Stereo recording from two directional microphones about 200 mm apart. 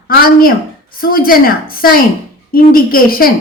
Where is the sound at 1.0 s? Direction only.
45° left (ahead or behind).